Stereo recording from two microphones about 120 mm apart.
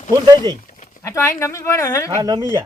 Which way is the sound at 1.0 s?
25° left (ahead or behind).